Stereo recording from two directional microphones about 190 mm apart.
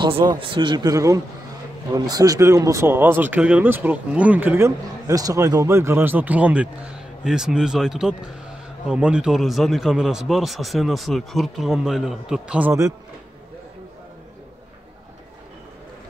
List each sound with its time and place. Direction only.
0.0 s speech: 25° right (ahead or behind)